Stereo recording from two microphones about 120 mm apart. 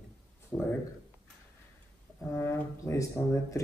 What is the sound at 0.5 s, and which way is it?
Speech, 5° left (ahead or behind).